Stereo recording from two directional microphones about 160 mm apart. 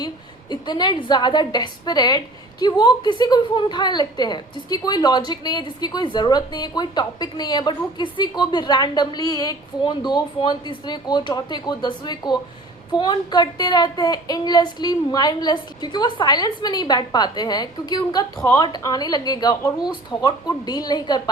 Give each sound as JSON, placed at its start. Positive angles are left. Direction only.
{"t": 0.5, "sound": "a woman's voice", "side_deg": 25}
{"t": 18.3, "sound": "a woman's voice", "side_deg": 15}
{"t": 18.6, "sound": "a woman's voice", "side_deg": 25}